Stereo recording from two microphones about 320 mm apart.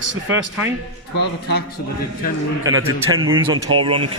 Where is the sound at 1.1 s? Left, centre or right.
Left.